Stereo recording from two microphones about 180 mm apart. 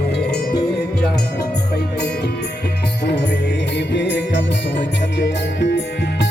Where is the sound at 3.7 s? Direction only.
75° left (ahead or behind).